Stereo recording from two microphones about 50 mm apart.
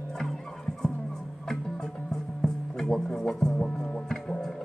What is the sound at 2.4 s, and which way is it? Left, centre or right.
Music, centre.